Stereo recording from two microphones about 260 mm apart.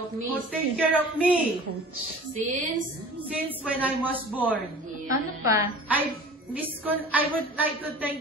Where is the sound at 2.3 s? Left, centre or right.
Right.